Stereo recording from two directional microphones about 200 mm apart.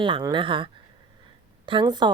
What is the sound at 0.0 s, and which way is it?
A woman's voice, 20° right (ahead or behind).